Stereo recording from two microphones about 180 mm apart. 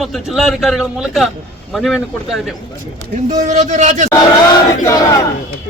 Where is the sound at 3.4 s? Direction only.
40° right (ahead or behind).